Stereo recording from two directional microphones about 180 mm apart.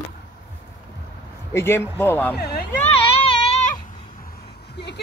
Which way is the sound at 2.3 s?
60° left (ahead or behind).